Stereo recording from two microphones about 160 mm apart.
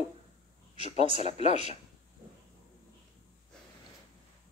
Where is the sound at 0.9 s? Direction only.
35° right (ahead or behind).